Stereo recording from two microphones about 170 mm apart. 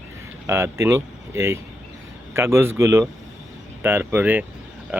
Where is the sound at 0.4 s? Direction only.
15° right (ahead or behind).